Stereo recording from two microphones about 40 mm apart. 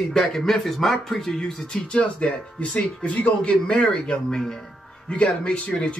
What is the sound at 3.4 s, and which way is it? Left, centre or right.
Speech, left.